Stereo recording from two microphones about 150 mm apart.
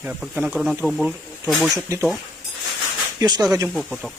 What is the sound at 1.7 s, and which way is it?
Speech, 15° right (ahead or behind).